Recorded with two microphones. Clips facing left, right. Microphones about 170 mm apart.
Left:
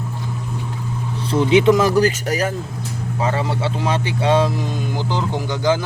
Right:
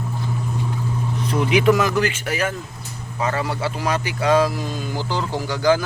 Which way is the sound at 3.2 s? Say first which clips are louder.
Left 1 dB; 25° left (ahead or behind).